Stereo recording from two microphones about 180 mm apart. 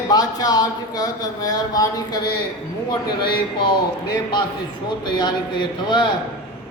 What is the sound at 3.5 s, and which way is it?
Speech, 25° left (ahead or behind).